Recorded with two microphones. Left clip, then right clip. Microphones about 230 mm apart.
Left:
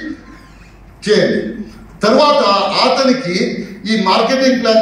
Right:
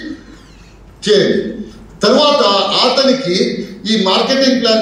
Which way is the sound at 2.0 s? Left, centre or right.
Centre.